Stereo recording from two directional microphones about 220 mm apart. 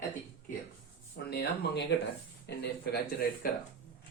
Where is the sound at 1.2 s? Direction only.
45° left (ahead or behind).